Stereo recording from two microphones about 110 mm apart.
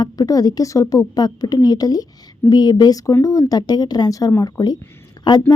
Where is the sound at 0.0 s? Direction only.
35° left (ahead or behind).